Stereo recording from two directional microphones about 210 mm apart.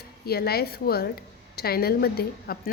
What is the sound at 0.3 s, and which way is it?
A woman's voice, 50° left (ahead or behind).